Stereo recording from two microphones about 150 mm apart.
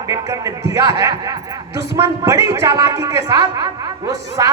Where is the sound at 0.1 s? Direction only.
20° right (ahead or behind).